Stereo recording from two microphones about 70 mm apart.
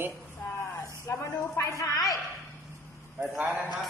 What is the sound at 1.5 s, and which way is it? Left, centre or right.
Speech, left.